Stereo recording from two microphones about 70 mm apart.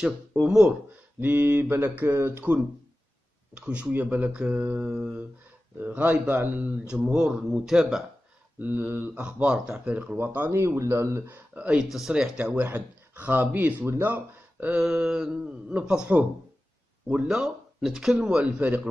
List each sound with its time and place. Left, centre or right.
0.0 s speech: centre
1.2 s speech: right; by 5.2 s centre
5.8 s speech: right
6.9 s speech: centre
8.5 s speech: right
11.2 s speech: right
11.8 s speech: centre
12.4 s speech: right
14.8 s speech: centre
17.3 s speech: centre